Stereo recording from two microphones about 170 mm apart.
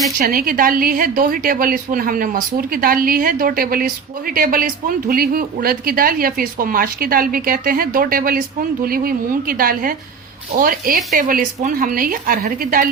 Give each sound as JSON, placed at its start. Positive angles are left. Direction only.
{"t": 0.2, "sound": "a woman's voice", "side_deg": -55}